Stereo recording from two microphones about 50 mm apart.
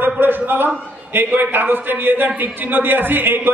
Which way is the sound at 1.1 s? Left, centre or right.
Right.